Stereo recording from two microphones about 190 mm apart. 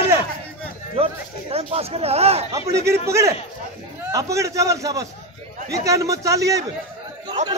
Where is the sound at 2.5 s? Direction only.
15° right (ahead or behind).